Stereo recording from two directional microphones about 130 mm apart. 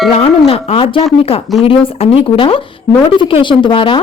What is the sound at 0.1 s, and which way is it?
Music, 50° left (ahead or behind).